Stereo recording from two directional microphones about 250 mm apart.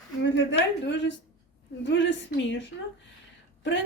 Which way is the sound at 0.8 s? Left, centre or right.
Left.